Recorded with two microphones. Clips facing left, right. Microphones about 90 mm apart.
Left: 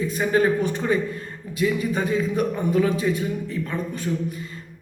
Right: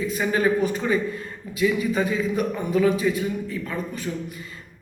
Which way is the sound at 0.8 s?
25° left (ahead or behind).